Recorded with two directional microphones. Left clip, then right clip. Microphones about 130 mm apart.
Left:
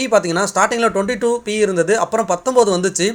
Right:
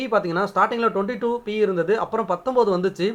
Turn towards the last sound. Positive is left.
turn(degrees=25)  # may be behind; listen again after turning